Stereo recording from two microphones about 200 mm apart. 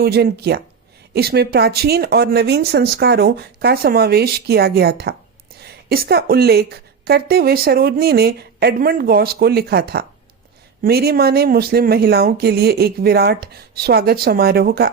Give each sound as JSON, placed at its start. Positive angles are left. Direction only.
{"t": 0.0, "sound": "a woman's voice", "side_deg": -55}